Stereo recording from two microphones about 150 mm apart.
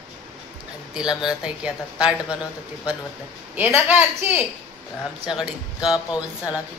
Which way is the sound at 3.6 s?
10° right (ahead or behind).